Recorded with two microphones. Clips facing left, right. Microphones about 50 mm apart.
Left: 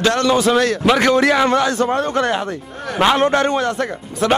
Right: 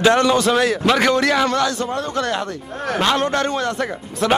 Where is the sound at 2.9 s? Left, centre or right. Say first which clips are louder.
Left 4 dB; centre.